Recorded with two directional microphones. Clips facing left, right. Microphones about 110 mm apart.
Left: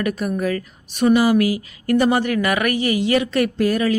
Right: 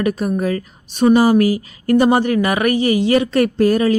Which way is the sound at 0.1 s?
30° right (ahead or behind).